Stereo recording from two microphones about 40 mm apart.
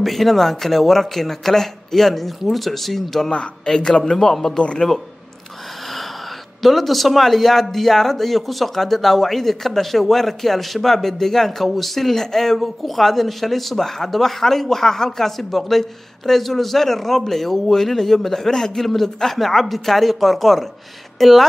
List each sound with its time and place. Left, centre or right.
0.0 s a man's voice: centre
4.6 s speech: left
6.6 s a man's voice: centre